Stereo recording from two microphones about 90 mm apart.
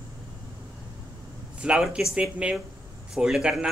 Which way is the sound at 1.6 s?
10° right (ahead or behind).